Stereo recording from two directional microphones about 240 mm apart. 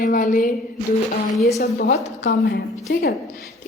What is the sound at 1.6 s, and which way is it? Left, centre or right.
Speech, left.